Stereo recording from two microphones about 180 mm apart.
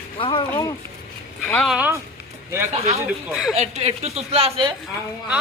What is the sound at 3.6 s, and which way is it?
A woman's voice, 35° right (ahead or behind).